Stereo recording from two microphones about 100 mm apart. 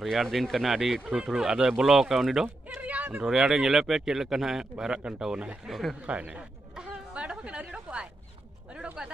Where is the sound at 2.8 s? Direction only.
15° right (ahead or behind).